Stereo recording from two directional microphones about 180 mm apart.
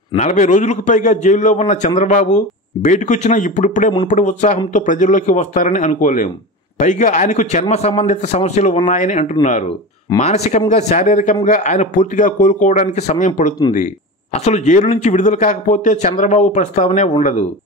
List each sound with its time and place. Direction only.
0.1 s speech: 40° left (ahead or behind)